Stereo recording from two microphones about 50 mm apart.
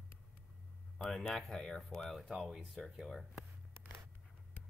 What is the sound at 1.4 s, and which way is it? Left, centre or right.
Speech, centre.